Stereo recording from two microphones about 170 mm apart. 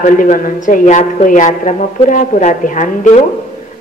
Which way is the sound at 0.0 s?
50° left (ahead or behind).